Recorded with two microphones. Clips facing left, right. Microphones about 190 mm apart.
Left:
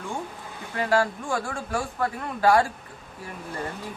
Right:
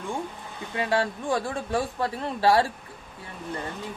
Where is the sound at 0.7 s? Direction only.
20° right (ahead or behind).